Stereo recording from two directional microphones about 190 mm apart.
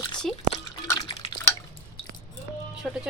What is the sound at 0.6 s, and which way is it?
Drip, 20° left (ahead or behind).